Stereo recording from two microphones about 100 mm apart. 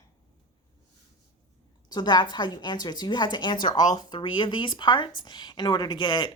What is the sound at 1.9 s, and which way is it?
A woman's voice, 45° left (ahead or behind).